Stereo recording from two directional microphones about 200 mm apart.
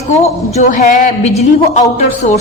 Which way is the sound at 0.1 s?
35° left (ahead or behind).